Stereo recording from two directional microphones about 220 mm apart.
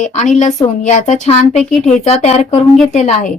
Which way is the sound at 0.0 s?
35° left (ahead or behind).